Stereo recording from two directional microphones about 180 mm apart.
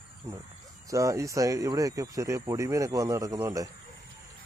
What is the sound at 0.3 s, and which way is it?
Speech, 15° right (ahead or behind).